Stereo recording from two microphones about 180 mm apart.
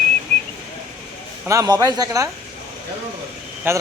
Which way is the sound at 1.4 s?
20° right (ahead or behind).